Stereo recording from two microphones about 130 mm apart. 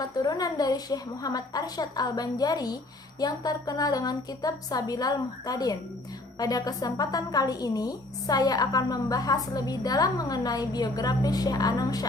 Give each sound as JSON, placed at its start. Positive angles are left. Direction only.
{"t": 0.0, "sound": "a woman's voice", "side_deg": 30}